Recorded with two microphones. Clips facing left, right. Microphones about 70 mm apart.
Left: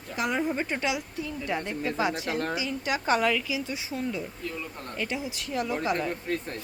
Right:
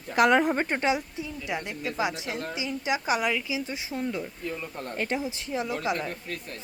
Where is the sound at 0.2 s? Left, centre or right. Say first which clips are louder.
Right 7 dB; right.